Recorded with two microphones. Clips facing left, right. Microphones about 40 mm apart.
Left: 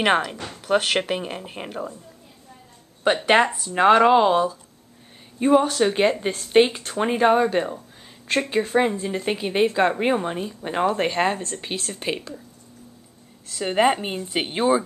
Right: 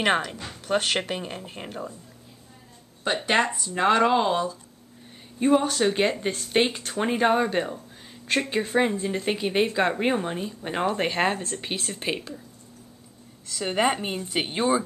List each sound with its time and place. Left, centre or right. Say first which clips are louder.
0.0 s speech: left 3 dB; centre
3.3 s a woman's voice: left 4 dB; left; by 12.4 s centre
13.5 s a woman's voice: left 4 dB; centre